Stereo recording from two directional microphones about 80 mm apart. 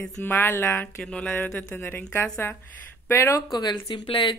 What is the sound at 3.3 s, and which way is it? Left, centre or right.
Speech, left.